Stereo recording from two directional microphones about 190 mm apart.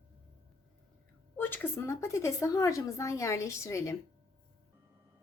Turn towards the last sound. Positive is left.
turn(degrees=15)  # may be behind; listen again after turning